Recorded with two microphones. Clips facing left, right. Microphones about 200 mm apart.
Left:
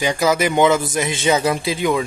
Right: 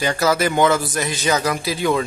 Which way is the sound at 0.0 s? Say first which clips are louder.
Left 1 dB; 15° left (ahead or behind).